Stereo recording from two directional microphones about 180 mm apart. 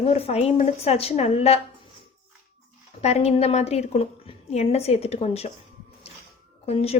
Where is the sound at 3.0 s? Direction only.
35° left (ahead or behind).